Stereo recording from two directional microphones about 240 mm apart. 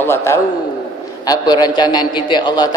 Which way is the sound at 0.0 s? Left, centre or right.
Centre.